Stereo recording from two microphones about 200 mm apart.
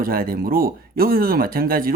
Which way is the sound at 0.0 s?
45° right (ahead or behind).